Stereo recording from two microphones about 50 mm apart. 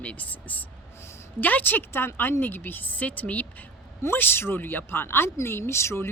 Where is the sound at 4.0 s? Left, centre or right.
Left.